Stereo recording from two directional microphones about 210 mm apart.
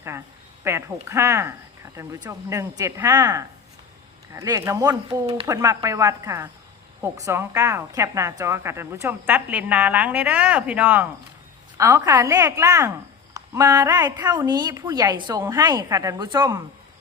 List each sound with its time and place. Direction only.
0.6 s a woman's voice: 15° right (ahead or behind)